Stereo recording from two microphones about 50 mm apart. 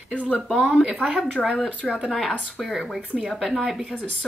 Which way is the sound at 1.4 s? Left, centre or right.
Centre.